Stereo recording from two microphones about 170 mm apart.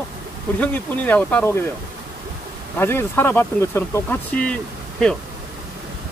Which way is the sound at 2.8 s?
15° left (ahead or behind).